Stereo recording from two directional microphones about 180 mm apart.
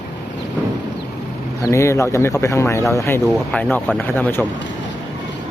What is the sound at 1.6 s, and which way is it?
Speech, 15° left (ahead or behind).